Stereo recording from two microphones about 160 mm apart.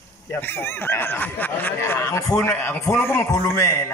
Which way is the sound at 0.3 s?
15° left (ahead or behind).